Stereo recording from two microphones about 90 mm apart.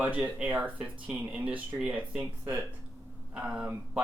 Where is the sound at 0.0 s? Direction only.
15° right (ahead or behind).